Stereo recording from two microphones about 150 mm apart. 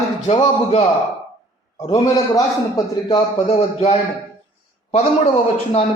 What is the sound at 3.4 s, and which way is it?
Speech, 45° left (ahead or behind).